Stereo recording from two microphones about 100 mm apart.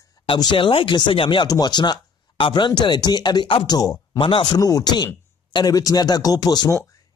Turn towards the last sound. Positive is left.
turn(degrees=45)  # may be behind; listen again after turning